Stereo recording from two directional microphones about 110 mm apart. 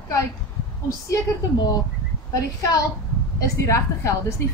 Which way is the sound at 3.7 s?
25° left (ahead or behind).